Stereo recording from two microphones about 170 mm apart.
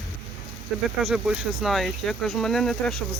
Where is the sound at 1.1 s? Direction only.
Centre (ahead or behind).